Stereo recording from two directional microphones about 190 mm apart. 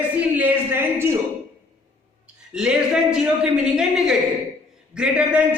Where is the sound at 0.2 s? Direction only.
10° right (ahead or behind).